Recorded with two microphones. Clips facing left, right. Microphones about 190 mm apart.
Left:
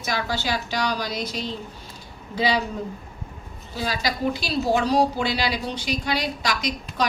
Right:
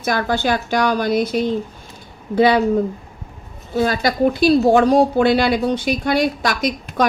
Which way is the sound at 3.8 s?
55° right (ahead or behind).